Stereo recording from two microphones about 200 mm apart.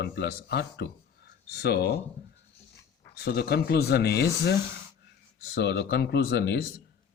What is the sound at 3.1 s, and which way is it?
Speech, 50° left (ahead or behind).